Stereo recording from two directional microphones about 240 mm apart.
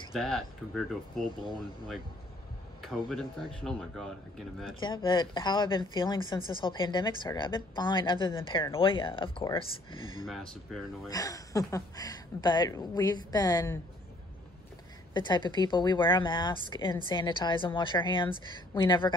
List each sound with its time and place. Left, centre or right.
0.1 s speech: centre
2.8 s speech: centre
4.7 s speech: centre
10.2 s speech: centre
11.1 s speech: centre
15.1 s speech: centre